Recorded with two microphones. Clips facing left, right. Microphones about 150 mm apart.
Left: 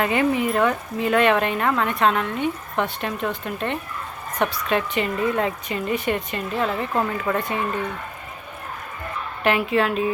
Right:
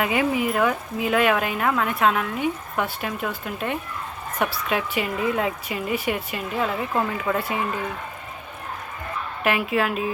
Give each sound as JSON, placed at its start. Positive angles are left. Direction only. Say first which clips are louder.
{"t": 0.0, "sound": "speech", "louder": "left 2 dB", "side_deg": -5}
{"t": 9.4, "sound": "speech", "louder": "left 2 dB", "side_deg": -5}